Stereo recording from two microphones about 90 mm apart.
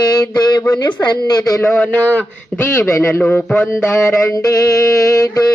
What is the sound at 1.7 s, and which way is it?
Speech, 20° left (ahead or behind).